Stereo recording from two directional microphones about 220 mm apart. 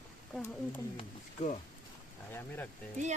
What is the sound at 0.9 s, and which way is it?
Speech, 30° left (ahead or behind).